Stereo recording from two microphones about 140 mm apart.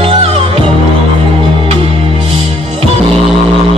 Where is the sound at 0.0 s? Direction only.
40° right (ahead or behind).